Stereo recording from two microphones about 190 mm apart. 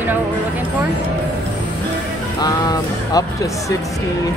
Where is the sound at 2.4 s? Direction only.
20° left (ahead or behind).